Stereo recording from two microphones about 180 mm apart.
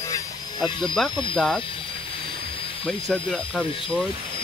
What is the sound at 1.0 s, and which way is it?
Speech, centre (ahead or behind).